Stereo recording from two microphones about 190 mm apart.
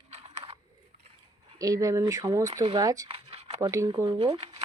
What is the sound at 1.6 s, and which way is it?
A woman's voice, 20° right (ahead or behind).